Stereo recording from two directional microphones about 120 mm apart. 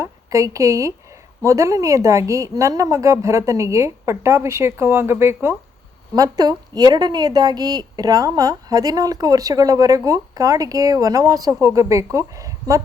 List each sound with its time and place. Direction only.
0.0 s a woman's voice: 25° right (ahead or behind)
6.1 s a woman's voice: 30° right (ahead or behind)